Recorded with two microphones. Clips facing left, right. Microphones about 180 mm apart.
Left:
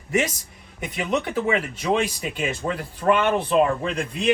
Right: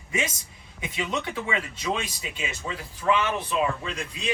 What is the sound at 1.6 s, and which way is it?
Speech, 55° left (ahead or behind).